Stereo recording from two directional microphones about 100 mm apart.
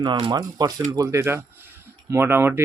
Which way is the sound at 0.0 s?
50° right (ahead or behind).